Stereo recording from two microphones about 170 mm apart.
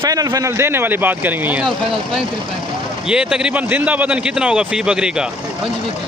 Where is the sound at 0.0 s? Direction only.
20° right (ahead or behind).